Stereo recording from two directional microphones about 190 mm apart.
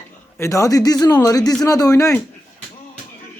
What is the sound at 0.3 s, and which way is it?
Speech, 15° left (ahead or behind).